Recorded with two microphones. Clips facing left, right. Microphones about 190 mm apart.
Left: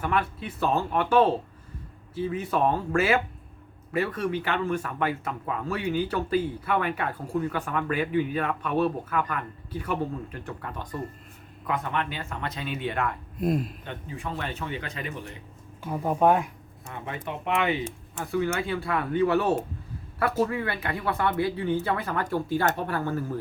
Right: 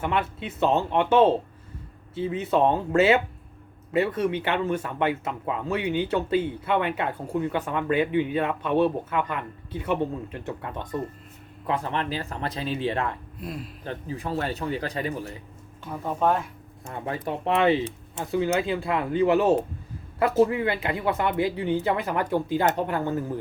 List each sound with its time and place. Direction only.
0.0 s speech: 25° right (ahead or behind)
13.4 s speech: 50° left (ahead or behind)
13.8 s speech: 35° right (ahead or behind)
15.8 s speech: 10° left (ahead or behind)
17.2 s speech: 35° right (ahead or behind)
18.2 s speech: 20° right (ahead or behind)